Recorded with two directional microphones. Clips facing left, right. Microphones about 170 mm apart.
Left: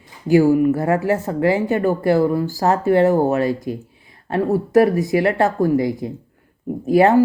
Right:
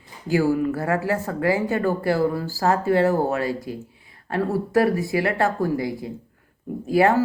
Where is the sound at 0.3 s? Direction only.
15° left (ahead or behind).